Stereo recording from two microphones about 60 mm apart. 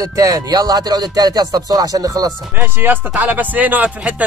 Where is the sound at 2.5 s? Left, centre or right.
Right.